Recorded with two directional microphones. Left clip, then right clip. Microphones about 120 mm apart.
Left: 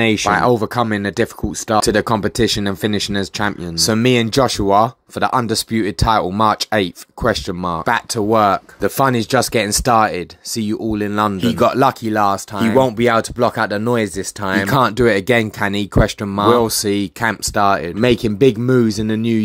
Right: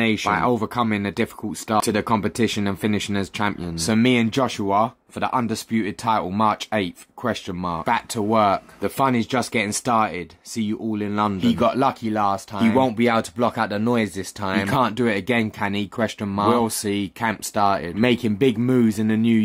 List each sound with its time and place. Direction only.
0.0 s speech: 35° left (ahead or behind)